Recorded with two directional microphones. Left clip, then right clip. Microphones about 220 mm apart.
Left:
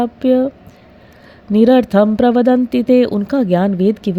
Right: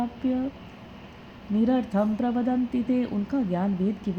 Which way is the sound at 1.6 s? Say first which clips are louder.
Left 15 dB; 50° left (ahead or behind).